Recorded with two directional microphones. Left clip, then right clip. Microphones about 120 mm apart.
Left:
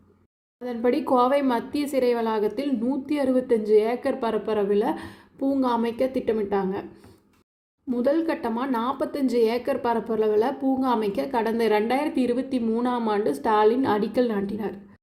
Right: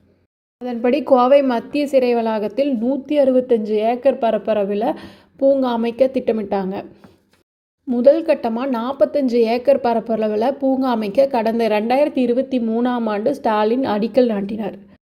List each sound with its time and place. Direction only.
0.6 s a woman's voice: 25° right (ahead or behind)
7.9 s a woman's voice: 20° right (ahead or behind)